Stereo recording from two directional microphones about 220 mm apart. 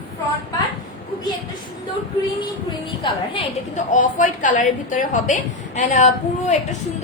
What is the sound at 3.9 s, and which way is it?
A woman's voice, 35° left (ahead or behind).